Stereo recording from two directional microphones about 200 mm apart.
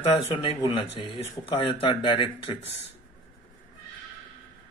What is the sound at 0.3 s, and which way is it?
A man's voice, 25° left (ahead or behind).